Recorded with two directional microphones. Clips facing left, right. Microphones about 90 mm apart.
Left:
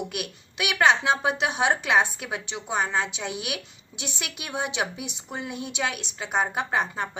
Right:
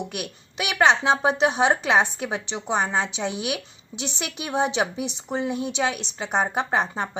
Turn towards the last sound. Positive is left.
turn(degrees=-20)  # may be behind; listen again after turning